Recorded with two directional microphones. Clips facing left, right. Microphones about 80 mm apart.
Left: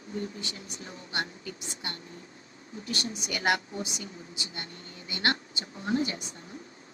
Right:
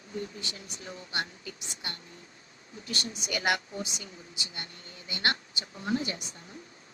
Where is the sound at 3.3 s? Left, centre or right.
Left.